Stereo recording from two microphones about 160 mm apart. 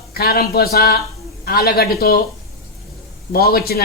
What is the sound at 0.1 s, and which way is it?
A woman's voice, 75° left (ahead or behind).